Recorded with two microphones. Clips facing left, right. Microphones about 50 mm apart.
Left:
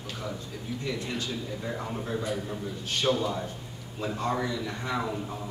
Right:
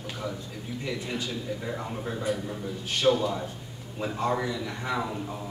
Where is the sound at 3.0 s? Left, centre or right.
Centre.